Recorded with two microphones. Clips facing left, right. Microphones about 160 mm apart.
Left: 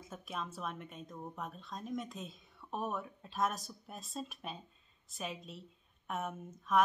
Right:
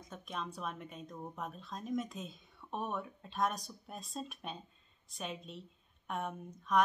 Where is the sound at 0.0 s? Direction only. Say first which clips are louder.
Even; 5° left (ahead or behind).